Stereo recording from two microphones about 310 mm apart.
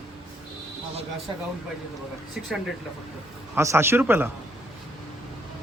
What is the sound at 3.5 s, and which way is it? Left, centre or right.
Speech, centre.